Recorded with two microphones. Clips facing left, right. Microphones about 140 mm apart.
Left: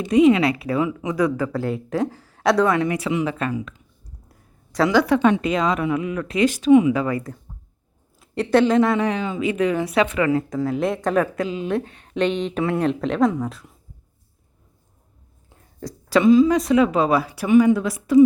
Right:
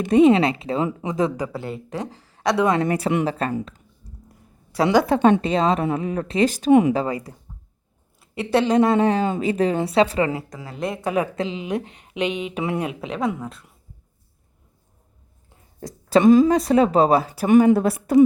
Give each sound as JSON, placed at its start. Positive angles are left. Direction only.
{"t": 0.1, "sound": "speech", "side_deg": -30}
{"t": 1.5, "sound": "speech", "side_deg": 0}
{"t": 2.8, "sound": "speech", "side_deg": -40}
{"t": 4.3, "sound": "a sound", "side_deg": -10}
{"t": 4.9, "sound": "speech", "side_deg": -25}
{"t": 7.1, "sound": "a woman's voice", "side_deg": -15}
{"t": 8.8, "sound": "speech", "side_deg": -30}
{"t": 10.5, "sound": "speech", "side_deg": 0}
{"t": 11.1, "sound": "a woman's voice", "side_deg": -20}
{"t": 16.5, "sound": "speech", "side_deg": -35}
{"t": 17.4, "sound": "speech", "side_deg": -45}